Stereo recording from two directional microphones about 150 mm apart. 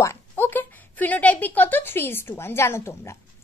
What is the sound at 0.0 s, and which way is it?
A woman's voice, 15° left (ahead or behind).